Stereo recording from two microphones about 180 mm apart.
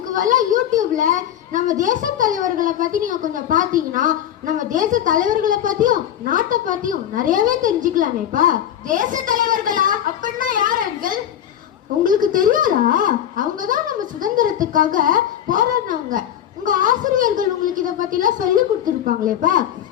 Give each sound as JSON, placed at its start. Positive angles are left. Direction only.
{"t": 0.1, "sound": "a child's voice", "side_deg": -45}